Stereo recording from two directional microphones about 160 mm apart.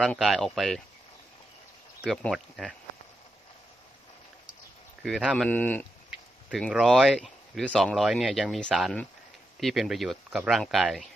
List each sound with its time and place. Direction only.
0.0 s speech: centre (ahead or behind)
2.0 s speech: centre (ahead or behind)
5.0 s speech: 5° right (ahead or behind)
5.5 s speech: 10° left (ahead or behind)
6.1 s speech: centre (ahead or behind)